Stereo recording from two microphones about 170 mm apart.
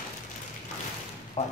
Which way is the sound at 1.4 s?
35° left (ahead or behind).